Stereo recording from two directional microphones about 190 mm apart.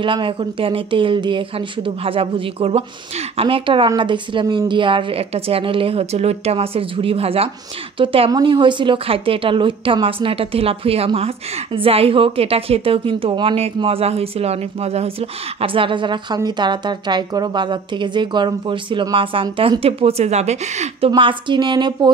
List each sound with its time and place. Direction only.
0.0 s a woman's voice: 25° right (ahead or behind)
21.1 s a woman's voice: 25° right (ahead or behind)